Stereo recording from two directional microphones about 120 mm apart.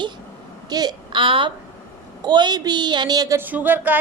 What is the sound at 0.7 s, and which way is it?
A woman's voice, 35° right (ahead or behind).